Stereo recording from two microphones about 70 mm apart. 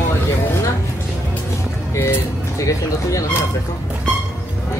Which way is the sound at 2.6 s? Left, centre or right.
Left.